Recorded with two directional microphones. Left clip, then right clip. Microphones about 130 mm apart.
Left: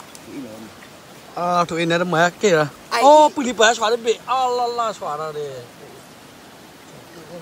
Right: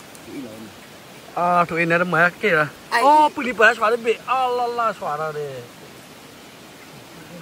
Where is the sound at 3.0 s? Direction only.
20° left (ahead or behind).